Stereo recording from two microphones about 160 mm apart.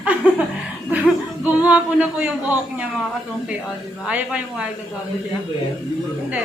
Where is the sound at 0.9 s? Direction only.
10° right (ahead or behind).